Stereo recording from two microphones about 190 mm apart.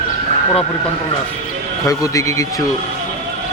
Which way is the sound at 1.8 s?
15° left (ahead or behind).